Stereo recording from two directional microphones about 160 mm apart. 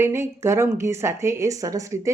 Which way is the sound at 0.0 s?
15° right (ahead or behind).